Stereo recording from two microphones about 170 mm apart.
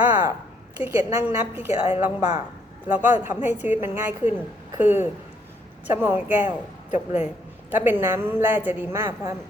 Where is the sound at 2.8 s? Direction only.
10° right (ahead or behind).